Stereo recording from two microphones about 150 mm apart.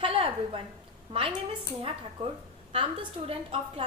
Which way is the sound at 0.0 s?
40° right (ahead or behind).